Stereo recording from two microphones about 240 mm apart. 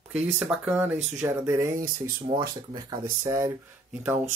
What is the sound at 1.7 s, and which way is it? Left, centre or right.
Speech, right.